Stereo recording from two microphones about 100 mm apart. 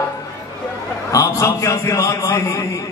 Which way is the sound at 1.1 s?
35° left (ahead or behind).